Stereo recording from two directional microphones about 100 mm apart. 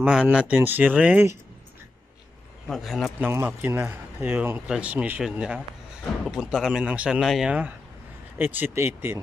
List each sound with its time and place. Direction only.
0.0 s speech: 10° right (ahead or behind)
2.7 s speech: centre (ahead or behind)
3.2 s speech: 20° right (ahead or behind)